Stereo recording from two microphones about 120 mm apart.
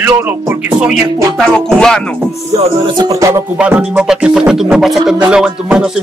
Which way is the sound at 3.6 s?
10° right (ahead or behind).